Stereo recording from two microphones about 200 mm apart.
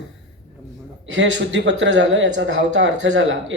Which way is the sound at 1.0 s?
65° right (ahead or behind).